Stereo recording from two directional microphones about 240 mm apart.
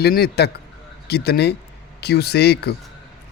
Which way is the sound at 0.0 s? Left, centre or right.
Left.